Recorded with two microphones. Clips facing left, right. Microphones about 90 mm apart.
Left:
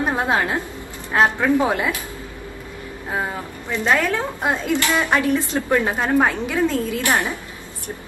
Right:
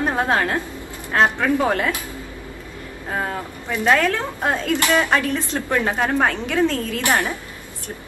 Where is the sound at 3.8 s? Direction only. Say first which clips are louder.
Right 2 dB; 15° left (ahead or behind).